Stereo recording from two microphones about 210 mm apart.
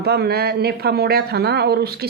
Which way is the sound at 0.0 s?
50° right (ahead or behind).